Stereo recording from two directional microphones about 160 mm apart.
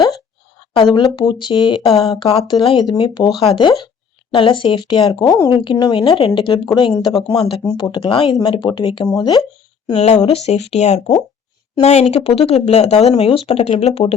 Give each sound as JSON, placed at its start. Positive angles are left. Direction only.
{"t": 1.1, "sound": "speech", "side_deg": 30}
{"t": 2.3, "sound": "speech", "side_deg": 20}
{"t": 7.3, "sound": "speech", "side_deg": 35}
{"t": 10.0, "sound": "speech", "side_deg": 45}